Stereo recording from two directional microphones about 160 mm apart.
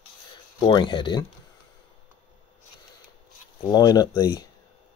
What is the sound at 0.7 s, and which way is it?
Speech, 30° left (ahead or behind).